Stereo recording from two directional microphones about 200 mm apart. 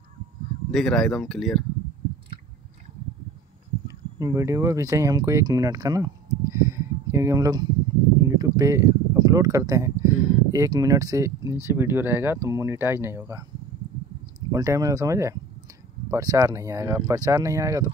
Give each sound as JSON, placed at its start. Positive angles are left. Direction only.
{"t": 0.7, "sound": "speech", "side_deg": 0}
{"t": 3.8, "sound": "speech", "side_deg": -15}
{"t": 14.5, "sound": "speech", "side_deg": -15}